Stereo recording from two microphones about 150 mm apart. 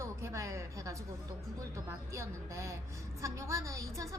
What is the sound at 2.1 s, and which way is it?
A woman's voice, 20° right (ahead or behind).